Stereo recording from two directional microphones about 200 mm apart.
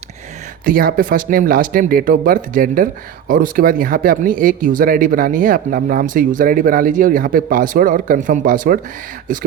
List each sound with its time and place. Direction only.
0.6 s speech: 45° right (ahead or behind)